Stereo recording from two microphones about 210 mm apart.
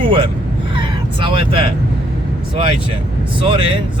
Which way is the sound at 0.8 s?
25° right (ahead or behind).